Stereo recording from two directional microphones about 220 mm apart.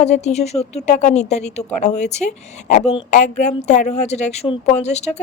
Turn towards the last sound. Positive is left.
turn(degrees=30)  # may be behind; listen again after turning